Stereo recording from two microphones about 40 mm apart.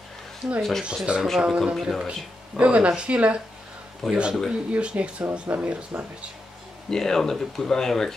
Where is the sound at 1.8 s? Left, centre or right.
Centre.